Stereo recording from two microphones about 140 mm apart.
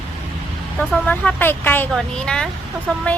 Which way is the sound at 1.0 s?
15° left (ahead or behind).